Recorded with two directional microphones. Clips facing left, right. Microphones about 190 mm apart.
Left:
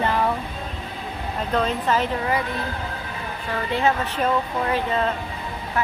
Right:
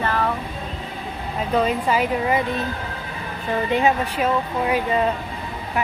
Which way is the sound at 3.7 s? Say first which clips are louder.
Right 1 dB; 15° right (ahead or behind).